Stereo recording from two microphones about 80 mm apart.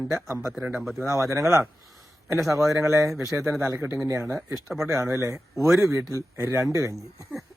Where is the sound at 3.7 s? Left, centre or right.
Right.